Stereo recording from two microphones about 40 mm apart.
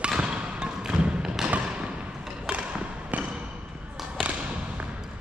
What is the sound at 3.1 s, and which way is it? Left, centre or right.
Basketball bounce, right.